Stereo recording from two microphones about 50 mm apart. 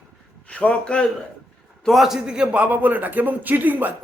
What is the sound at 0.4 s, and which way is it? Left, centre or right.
Speech, left.